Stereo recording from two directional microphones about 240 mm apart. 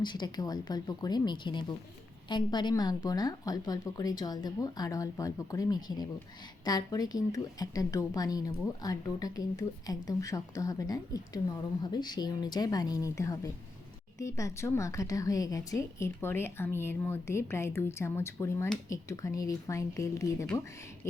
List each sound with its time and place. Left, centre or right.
0.0 s a woman's voice: centre